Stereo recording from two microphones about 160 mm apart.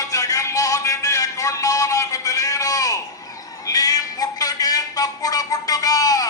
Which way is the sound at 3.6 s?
25° left (ahead or behind).